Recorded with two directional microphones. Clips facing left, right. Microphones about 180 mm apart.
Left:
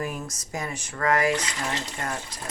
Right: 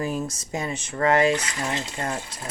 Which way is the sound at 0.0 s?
30° right (ahead or behind).